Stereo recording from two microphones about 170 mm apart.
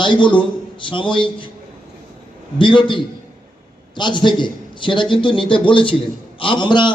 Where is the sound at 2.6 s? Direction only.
30° left (ahead or behind).